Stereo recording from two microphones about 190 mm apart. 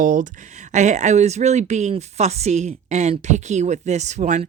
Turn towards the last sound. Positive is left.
turn(degrees=-40)  # may be behind; listen again after turning